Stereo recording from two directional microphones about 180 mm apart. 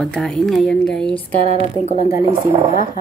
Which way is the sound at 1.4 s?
35° right (ahead or behind).